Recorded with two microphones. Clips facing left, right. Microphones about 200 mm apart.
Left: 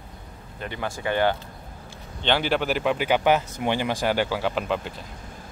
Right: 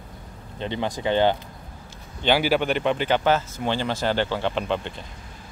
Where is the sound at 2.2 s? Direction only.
10° right (ahead or behind).